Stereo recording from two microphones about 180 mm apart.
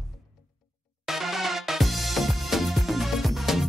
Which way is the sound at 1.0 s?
Centre (ahead or behind).